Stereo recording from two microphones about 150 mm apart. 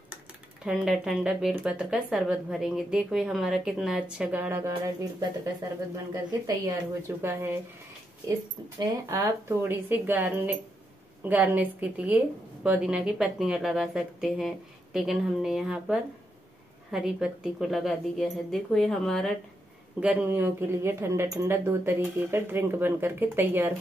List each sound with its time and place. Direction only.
0.7 s speech: centre (ahead or behind); by 4.9 s 20° right (ahead or behind)
6.1 s speech: 20° right (ahead or behind)
8.7 s speech: 20° right (ahead or behind); by 19.3 s 5° left (ahead or behind)
20.0 s speech: 10° right (ahead or behind)